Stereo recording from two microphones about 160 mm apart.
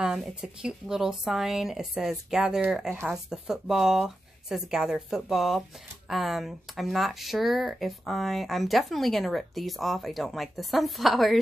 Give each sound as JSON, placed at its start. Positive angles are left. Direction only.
{"t": 0.0, "sound": "speech", "side_deg": -5}